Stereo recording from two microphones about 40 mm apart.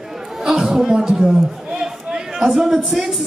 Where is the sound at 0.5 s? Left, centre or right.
Centre.